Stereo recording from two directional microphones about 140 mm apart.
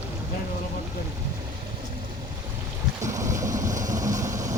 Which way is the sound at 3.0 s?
25° right (ahead or behind).